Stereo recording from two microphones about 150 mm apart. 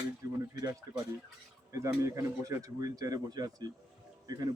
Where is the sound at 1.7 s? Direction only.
20° right (ahead or behind).